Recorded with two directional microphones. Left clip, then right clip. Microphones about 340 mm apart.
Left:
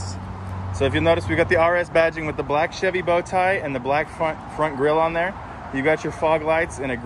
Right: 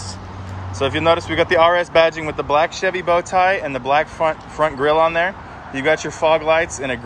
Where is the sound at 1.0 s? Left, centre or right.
Centre.